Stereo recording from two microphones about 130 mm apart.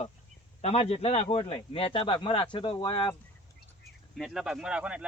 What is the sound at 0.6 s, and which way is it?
A man's voice, 50° left (ahead or behind).